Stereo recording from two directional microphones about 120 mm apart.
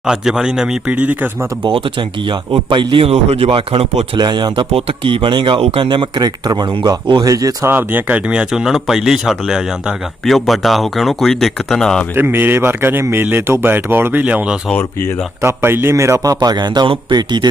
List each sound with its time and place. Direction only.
0.0 s speech: 5° right (ahead or behind)
1.6 s speech: 45° right (ahead or behind)
3.1 s speech: 60° right (ahead or behind)
4.2 s a man's voice: 35° right (ahead or behind)
4.7 s a man's voice: 50° right (ahead or behind); by 7.7 s 30° right (ahead or behind)
7.7 s speech: 15° right (ahead or behind); by 12.0 s 5° left (ahead or behind)
12.1 s speech: 15° right (ahead or behind)
14.8 s speech: 20° left (ahead or behind)
15.4 s a man's voice: 20° right (ahead or behind); by 17.5 s 40° right (ahead or behind)